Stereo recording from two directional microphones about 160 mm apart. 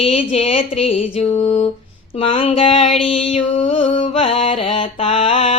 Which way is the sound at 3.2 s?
35° left (ahead or behind).